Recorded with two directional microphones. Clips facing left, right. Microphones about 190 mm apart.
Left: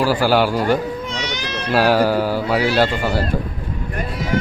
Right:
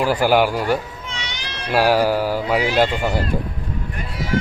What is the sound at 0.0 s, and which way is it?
Speech, 20° right (ahead or behind).